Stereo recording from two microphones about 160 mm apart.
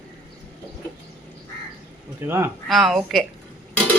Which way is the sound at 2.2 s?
15° right (ahead or behind).